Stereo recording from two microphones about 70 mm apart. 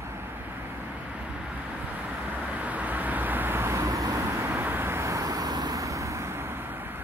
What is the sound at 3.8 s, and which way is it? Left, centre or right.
Vehicle, right.